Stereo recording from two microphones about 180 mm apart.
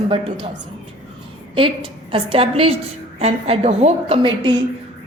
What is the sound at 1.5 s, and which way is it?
A woman's voice, 30° right (ahead or behind).